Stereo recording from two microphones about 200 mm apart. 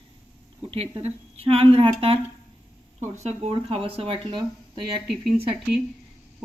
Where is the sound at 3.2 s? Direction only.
30° right (ahead or behind).